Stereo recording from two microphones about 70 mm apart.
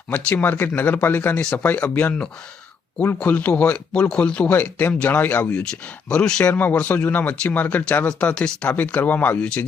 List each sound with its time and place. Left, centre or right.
0.1 s speech: left
3.2 s speech: left
4.5 s speech: left
6.1 s speech: centre
6.4 s speech: left